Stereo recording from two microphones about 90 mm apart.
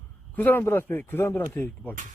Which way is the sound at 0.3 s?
20° left (ahead or behind).